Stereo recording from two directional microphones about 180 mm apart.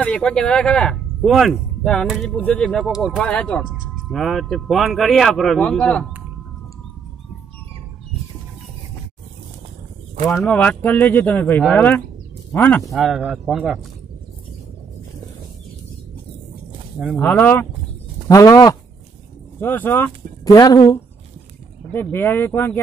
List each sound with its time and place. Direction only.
0.0 s speech: 5° left (ahead or behind)
10.3 s speech: 5° left (ahead or behind)
12.9 s speech: centre (ahead or behind)
17.2 s speech: 10° left (ahead or behind)